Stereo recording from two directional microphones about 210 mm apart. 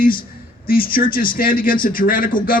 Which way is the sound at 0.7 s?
45° left (ahead or behind).